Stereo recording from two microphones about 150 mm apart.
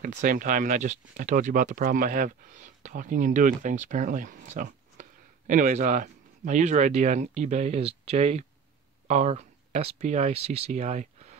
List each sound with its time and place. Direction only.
0.0 s speech: 60° right (ahead or behind)